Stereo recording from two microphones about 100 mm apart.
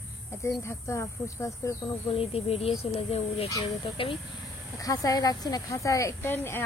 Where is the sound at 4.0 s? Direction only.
65° left (ahead or behind).